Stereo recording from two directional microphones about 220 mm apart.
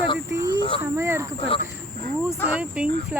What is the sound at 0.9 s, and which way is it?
Speech, 10° right (ahead or behind).